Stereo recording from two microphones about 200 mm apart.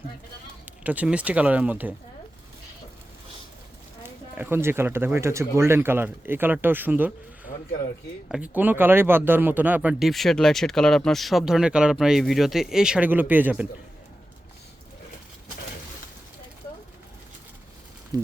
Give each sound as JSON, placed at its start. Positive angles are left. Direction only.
{"t": 0.6, "sound": "speech", "side_deg": -5}
{"t": 4.4, "sound": "speech", "side_deg": -10}
{"t": 18.1, "sound": "a sound", "side_deg": -20}